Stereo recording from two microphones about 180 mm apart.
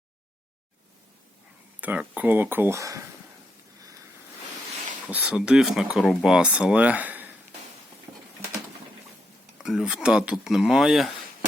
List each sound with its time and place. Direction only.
1.8 s speech: 10° right (ahead or behind)
5.0 s speech: 5° right (ahead or behind)
8.1 s a sound: 25° right (ahead or behind)
9.6 s speech: 5° right (ahead or behind)